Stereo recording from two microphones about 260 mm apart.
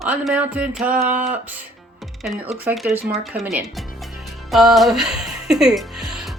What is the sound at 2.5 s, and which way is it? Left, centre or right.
Speech, centre.